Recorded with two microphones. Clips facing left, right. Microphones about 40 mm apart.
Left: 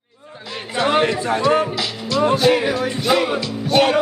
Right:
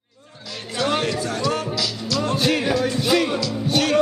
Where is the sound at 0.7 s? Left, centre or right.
Left.